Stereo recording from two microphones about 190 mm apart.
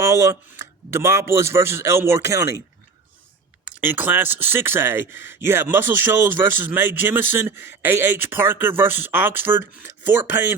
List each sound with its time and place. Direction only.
0.0 s speech: 15° right (ahead or behind)
3.8 s speech: 10° right (ahead or behind)